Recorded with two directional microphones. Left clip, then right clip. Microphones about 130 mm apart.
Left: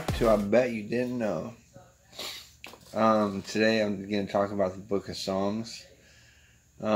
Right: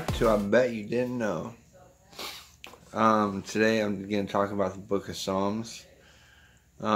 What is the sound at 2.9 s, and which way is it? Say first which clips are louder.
Speech: right 1 dB; 10° right (ahead or behind).